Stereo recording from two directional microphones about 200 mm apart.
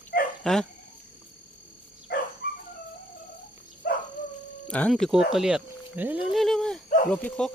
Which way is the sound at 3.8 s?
45° left (ahead or behind).